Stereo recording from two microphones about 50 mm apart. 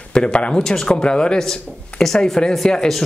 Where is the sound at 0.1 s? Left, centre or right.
Left.